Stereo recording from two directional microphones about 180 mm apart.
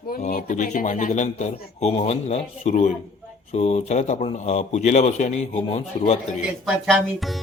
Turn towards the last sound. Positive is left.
turn(degrees=0)  # may be behind; listen again after turning